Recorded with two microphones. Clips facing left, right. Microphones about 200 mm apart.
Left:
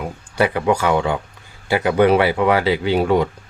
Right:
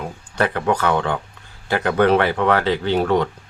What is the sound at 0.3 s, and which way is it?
Speech, 10° left (ahead or behind).